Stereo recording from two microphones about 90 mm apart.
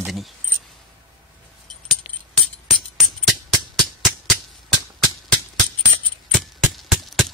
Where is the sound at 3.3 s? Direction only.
Centre (ahead or behind).